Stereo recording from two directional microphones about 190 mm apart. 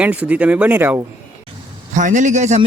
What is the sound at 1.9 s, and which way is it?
Speech, 40° right (ahead or behind).